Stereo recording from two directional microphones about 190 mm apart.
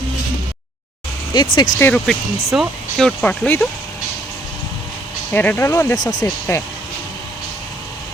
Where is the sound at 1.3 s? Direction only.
25° left (ahead or behind).